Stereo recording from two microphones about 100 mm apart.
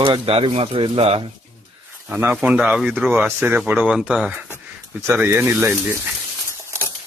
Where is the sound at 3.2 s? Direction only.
20° right (ahead or behind).